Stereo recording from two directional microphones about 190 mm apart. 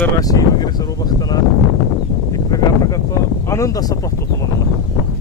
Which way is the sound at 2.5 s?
20° left (ahead or behind).